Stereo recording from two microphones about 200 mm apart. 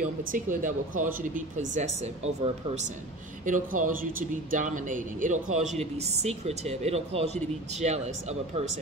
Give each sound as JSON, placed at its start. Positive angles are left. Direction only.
{"t": 0.3, "sound": "speech", "side_deg": -40}